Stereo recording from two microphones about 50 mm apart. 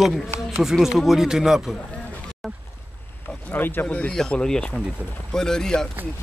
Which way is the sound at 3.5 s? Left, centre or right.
Left.